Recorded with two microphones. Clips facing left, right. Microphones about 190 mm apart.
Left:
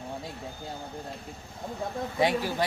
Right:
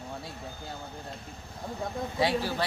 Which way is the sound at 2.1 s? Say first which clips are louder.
Left 2 dB; 15° left (ahead or behind).